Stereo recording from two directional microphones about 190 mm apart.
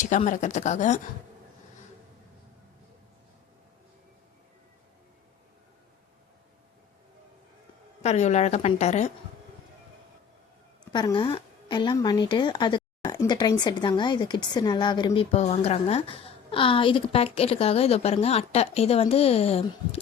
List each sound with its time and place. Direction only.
0.0 s speech: 40° left (ahead or behind)
8.0 s speech: 35° left (ahead or behind)
10.9 s speech: 25° left (ahead or behind)